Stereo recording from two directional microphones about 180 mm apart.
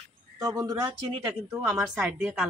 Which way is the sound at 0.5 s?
20° right (ahead or behind).